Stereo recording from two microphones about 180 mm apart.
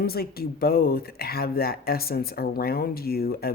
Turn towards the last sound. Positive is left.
turn(degrees=60)  # may be behind; listen again after turning